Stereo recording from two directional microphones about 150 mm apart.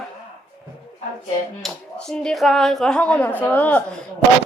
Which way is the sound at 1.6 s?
Centre (ahead or behind).